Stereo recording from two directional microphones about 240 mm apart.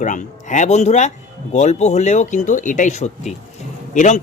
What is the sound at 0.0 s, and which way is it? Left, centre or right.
Speech, left.